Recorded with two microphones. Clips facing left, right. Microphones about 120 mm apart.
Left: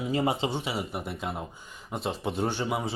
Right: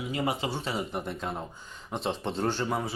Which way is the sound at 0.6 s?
10° left (ahead or behind).